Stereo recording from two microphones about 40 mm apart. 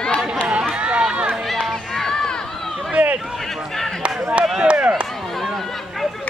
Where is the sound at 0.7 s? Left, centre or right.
Right.